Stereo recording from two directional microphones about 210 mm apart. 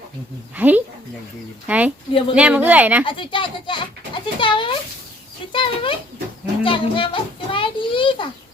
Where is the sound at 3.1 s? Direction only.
25° left (ahead or behind).